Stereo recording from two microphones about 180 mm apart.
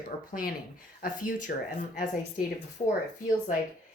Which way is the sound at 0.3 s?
50° left (ahead or behind).